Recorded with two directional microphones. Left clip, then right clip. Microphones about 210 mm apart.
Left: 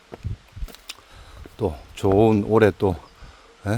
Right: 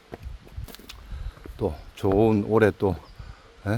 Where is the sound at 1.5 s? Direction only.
15° left (ahead or behind).